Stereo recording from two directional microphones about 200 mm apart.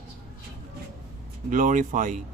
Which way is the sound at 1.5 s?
40° right (ahead or behind).